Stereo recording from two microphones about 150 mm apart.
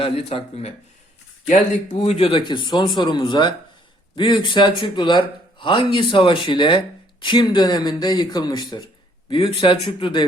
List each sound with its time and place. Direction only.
0.0 s speech: 40° left (ahead or behind)